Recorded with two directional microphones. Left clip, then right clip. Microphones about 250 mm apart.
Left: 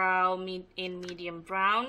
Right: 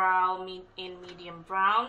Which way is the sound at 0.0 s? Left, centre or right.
Left.